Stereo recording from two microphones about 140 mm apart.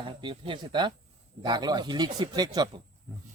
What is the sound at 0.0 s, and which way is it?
Speech, 35° right (ahead or behind).